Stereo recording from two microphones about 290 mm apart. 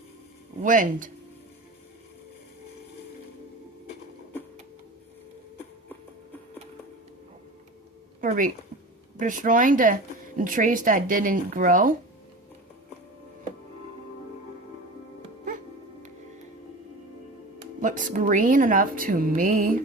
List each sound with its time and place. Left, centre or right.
0.6 s speech: right
8.2 s speech: right
17.7 s speech: right